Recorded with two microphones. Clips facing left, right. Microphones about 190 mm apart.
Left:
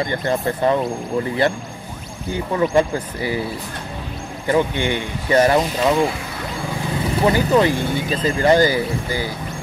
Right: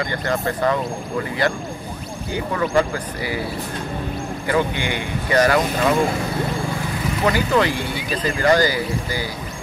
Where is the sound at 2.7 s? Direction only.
15° left (ahead or behind).